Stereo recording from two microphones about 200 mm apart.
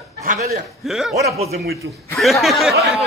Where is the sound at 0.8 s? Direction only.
Centre (ahead or behind).